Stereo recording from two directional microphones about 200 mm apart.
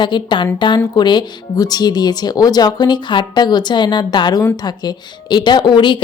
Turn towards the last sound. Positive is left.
turn(degrees=25)  # may be behind; listen again after turning